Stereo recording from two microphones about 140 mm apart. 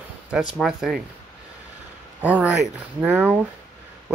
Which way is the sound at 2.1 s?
10° right (ahead or behind).